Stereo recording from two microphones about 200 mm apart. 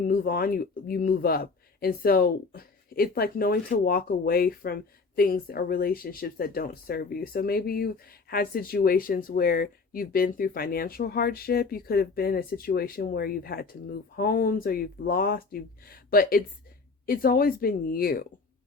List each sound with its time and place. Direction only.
0.0 s speech: 45° left (ahead or behind)